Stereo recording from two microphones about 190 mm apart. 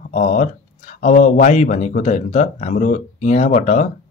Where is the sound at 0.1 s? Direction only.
40° left (ahead or behind).